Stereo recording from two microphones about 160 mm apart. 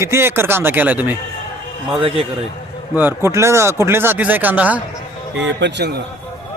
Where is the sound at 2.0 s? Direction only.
40° right (ahead or behind).